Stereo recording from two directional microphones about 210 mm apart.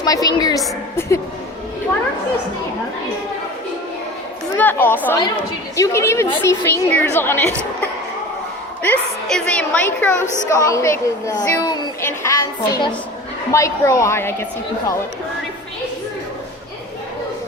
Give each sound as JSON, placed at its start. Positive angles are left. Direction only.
{"t": 0.0, "sound": "a woman's voice", "side_deg": 15}
{"t": 4.5, "sound": "a child's voice", "side_deg": 10}